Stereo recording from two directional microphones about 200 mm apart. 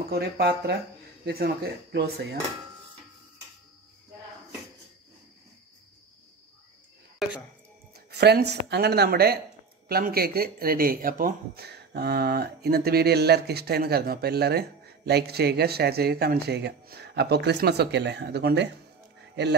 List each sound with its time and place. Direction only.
0.1 s speech: 55° right (ahead or behind)
7.2 s music: centre (ahead or behind)
8.1 s speech: 55° right (ahead or behind)